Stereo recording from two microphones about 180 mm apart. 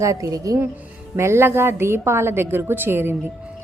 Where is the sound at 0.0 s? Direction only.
15° right (ahead or behind).